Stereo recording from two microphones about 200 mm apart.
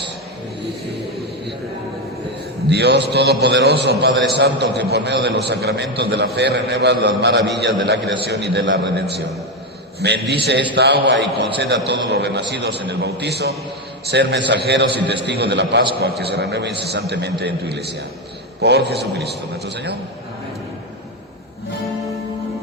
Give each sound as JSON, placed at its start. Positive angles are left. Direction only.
{"t": 2.6, "sound": "a man's voice", "side_deg": -55}